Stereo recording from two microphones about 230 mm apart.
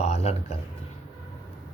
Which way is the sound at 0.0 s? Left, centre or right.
Left.